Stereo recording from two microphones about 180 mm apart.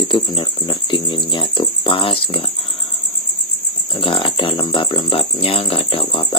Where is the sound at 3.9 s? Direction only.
30° left (ahead or behind).